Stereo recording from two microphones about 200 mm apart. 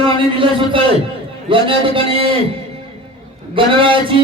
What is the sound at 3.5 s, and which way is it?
Speech, 25° right (ahead or behind).